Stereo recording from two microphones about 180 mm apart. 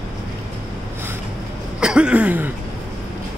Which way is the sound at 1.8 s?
5° right (ahead or behind).